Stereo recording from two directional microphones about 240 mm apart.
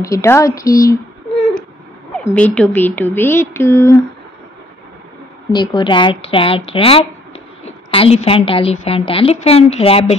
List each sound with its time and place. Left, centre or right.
0.0 s speech: centre
2.1 s speech: centre
5.5 s a woman's voice: centre